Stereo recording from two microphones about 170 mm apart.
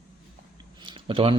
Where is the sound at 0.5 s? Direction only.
30° right (ahead or behind).